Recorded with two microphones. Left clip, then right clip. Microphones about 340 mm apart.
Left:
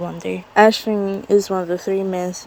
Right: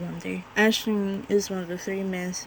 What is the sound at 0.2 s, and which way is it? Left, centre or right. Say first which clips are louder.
Speech: left 10 dB; centre.